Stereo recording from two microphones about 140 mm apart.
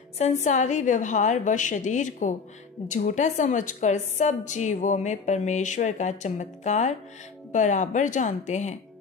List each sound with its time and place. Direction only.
0.2 s a woman's voice: 55° left (ahead or behind)